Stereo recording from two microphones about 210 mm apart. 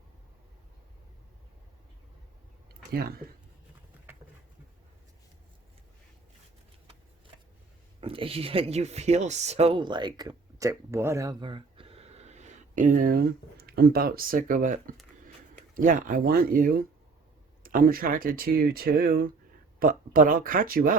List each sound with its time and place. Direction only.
2.9 s speech: 50° right (ahead or behind)
8.0 s speech: 25° right (ahead or behind); by 20.9 s 45° right (ahead or behind)